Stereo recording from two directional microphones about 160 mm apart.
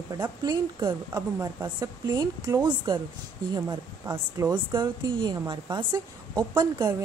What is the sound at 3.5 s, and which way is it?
Speech, 15° right (ahead or behind).